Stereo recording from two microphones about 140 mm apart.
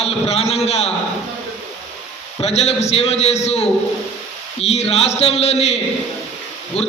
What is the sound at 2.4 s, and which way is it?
A man's voice, 50° left (ahead or behind).